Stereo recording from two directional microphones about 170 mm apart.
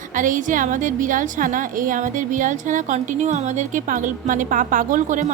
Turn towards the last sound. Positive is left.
turn(degrees=-50)  # may be behind; listen again after turning